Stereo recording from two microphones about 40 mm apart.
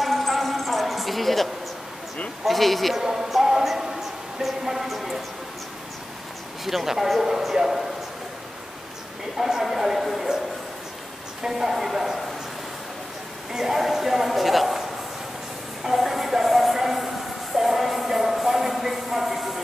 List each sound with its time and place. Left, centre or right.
0.0 s a sound: centre
2.4 s speech: centre
3.0 s speech: centre
6.6 s a man's voice: centre
9.4 s a man's voice: centre
11.4 s a man's voice: centre
13.5 s speech: centre
15.8 s a sound: centre